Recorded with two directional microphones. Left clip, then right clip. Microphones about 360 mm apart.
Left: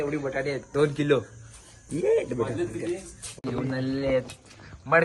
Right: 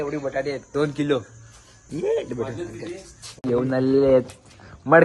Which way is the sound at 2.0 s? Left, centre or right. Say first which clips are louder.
Even; centre.